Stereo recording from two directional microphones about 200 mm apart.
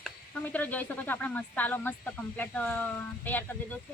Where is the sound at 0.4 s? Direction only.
10° left (ahead or behind).